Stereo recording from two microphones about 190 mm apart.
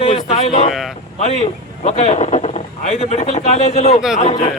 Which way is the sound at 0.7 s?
Centre (ahead or behind).